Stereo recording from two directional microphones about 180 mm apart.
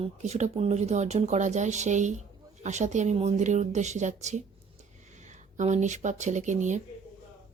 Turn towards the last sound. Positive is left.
turn(degrees=-40)  # may be behind; listen again after turning